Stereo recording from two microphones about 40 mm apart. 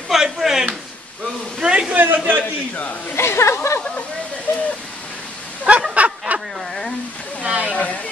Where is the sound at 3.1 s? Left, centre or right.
Left.